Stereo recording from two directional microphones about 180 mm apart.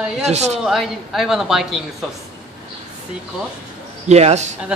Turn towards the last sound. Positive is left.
turn(degrees=-40)  # may be behind; listen again after turning